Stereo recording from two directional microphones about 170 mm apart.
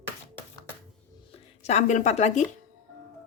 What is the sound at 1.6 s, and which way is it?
Speech, 40° left (ahead or behind).